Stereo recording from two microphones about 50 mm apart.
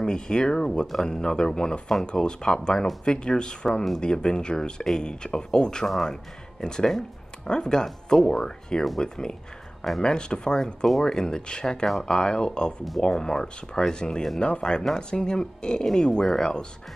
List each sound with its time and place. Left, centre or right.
0.0 s speech: centre
5.9 s speech: centre
6.6 s speech: centre